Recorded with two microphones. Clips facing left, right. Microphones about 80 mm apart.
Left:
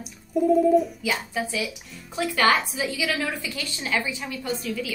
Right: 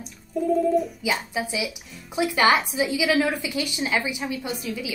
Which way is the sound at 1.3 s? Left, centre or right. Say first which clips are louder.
Even; centre.